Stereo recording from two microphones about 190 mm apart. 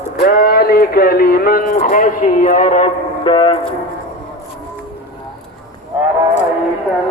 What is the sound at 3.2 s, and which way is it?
Speech, 25° left (ahead or behind).